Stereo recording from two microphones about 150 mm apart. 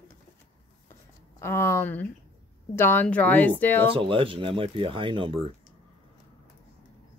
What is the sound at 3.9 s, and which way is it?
Speech, 35° right (ahead or behind).